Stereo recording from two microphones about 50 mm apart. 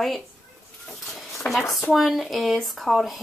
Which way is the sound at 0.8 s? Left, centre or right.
Centre.